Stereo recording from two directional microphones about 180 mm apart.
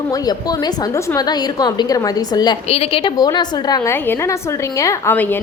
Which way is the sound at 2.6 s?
30° left (ahead or behind).